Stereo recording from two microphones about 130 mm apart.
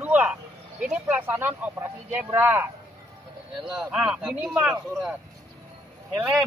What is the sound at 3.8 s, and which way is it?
Speech, 5° right (ahead or behind).